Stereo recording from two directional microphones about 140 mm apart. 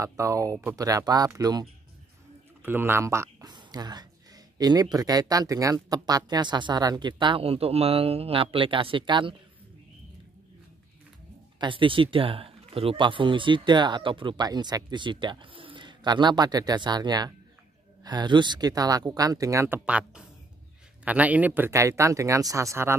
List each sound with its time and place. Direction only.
0.0 s speech: 20° right (ahead or behind)
2.6 s speech: 15° right (ahead or behind); by 9.3 s 35° right (ahead or behind)
11.6 s speech: 35° right (ahead or behind); by 19.8 s 20° right (ahead or behind)
19.9 s speech: 10° right (ahead or behind)